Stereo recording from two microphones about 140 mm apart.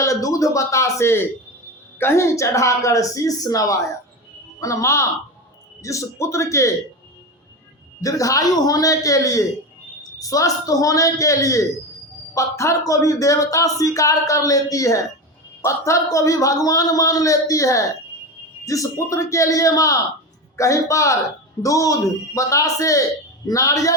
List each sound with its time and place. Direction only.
0.0 s a sound: 25° left (ahead or behind)
2.0 s speech: 20° left (ahead or behind)
8.0 s speech: 25° left (ahead or behind)